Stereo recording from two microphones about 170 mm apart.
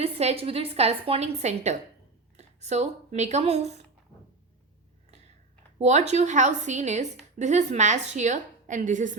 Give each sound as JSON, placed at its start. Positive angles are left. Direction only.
{"t": 0.0, "sound": "a woman's voice", "side_deg": -35}
{"t": 5.8, "sound": "a woman's voice", "side_deg": -40}